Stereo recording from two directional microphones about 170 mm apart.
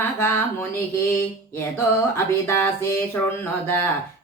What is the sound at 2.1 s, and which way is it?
Speech, 15° left (ahead or behind).